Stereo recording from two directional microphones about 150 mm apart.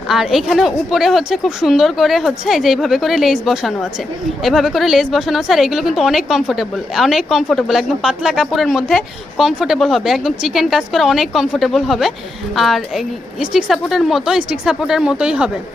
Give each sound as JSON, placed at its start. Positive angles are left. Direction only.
{"t": 0.1, "sound": "a woman's voice", "side_deg": 0}